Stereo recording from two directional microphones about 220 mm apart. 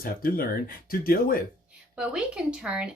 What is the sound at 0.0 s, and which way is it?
Speech, 40° left (ahead or behind).